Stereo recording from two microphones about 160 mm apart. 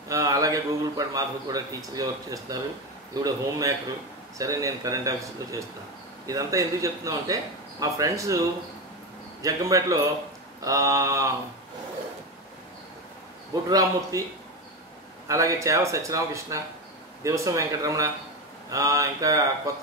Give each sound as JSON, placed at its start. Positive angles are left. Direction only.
{"t": 0.1, "sound": "a man's voice", "side_deg": -20}
{"t": 13.7, "sound": "a man's voice", "side_deg": -20}
{"t": 15.2, "sound": "a man's voice", "side_deg": -20}